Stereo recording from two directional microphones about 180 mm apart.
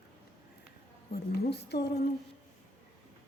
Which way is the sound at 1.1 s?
65° left (ahead or behind).